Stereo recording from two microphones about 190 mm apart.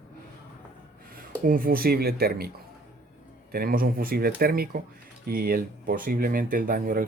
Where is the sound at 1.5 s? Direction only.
50° right (ahead or behind).